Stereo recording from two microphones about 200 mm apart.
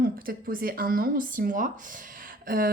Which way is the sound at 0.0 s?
45° right (ahead or behind).